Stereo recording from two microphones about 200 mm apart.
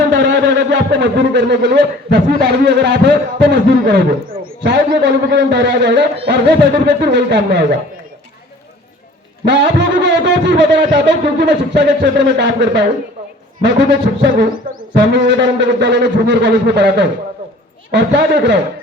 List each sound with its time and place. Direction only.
0.1 s a man's voice: 60° right (ahead or behind)
9.4 s a man's voice: 60° right (ahead or behind)
14.2 s a man's voice: 60° right (ahead or behind)
14.7 s music: 45° right (ahead or behind)
15.1 s a man's voice: 60° right (ahead or behind)